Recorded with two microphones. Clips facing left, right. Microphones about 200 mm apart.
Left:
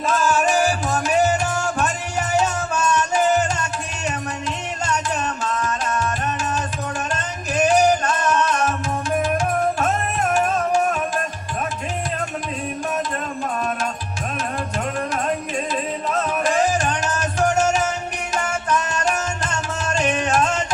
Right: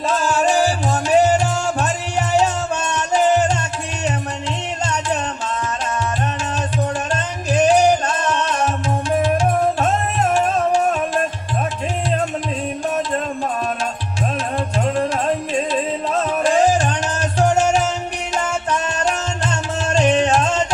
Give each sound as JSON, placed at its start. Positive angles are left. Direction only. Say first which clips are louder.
{"t": 0.2, "sound": "music", "louder": "right 2 dB", "side_deg": -30}
{"t": 7.1, "sound": "music", "louder": "right 5 dB", "side_deg": -30}
{"t": 16.4, "sound": "music", "louder": "right 5 dB", "side_deg": -30}
{"t": 18.4, "sound": "music", "louder": "left 1 dB", "side_deg": -25}